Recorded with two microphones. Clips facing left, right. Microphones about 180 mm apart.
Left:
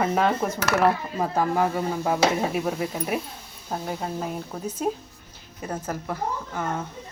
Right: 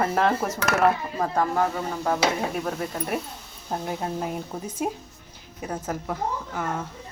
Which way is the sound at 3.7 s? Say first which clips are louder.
Right 1 dB; 5° right (ahead or behind).